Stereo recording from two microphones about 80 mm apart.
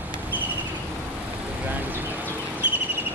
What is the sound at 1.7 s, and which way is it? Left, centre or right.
Vehicle, right.